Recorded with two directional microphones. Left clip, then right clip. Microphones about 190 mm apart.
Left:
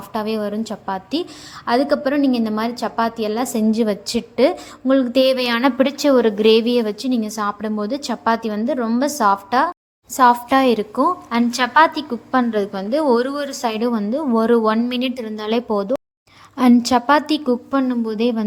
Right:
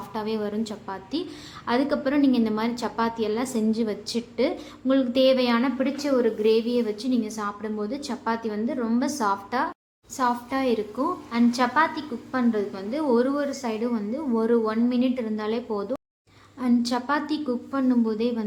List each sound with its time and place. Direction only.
0.1 s a woman's voice: 35° left (ahead or behind)